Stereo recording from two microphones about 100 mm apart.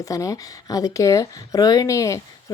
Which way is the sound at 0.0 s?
35° left (ahead or behind).